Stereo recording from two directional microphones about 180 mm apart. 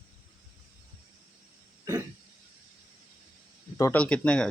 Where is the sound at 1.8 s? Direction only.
20° right (ahead or behind).